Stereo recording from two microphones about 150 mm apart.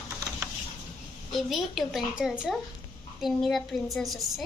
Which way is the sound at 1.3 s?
Centre (ahead or behind).